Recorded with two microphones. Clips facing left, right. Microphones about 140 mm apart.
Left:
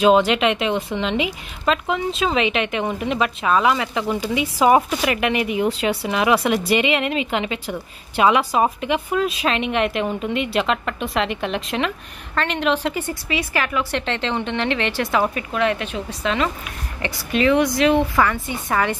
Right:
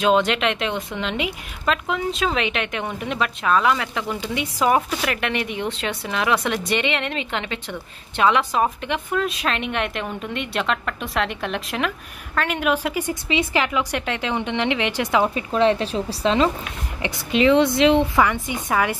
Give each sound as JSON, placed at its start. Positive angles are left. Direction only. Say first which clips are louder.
{"t": 0.0, "sound": "a woman's voice", "louder": "left 3 dB", "side_deg": 5}
{"t": 17.0, "sound": "a woman's voice", "louder": "right 1 dB", "side_deg": -20}